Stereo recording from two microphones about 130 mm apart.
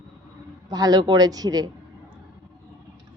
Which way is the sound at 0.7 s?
30° right (ahead or behind).